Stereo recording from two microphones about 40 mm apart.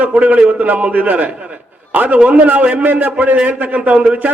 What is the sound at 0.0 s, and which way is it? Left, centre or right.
A man's voice, right.